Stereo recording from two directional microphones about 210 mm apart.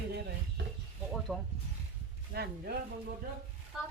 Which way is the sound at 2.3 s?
50° right (ahead or behind).